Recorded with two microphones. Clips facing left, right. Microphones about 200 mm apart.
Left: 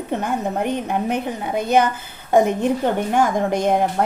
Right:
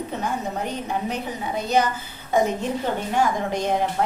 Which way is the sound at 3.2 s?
50° left (ahead or behind).